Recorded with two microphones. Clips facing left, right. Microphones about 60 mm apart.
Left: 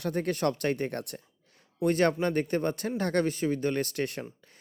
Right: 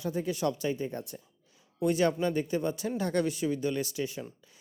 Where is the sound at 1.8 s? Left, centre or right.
Left.